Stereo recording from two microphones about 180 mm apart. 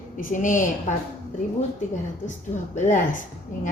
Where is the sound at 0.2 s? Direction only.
45° left (ahead or behind).